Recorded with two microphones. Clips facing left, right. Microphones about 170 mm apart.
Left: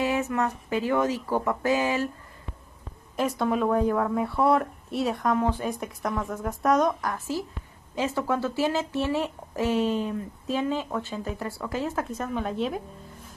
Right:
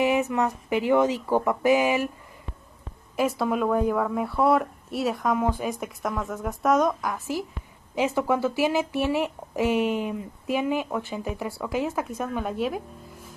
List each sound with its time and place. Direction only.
0.0 s speech: 15° right (ahead or behind)
3.2 s a woman's voice: centre (ahead or behind)
7.9 s a woman's voice: 15° right (ahead or behind)